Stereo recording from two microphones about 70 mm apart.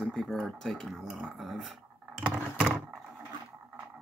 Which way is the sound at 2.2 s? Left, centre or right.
Centre.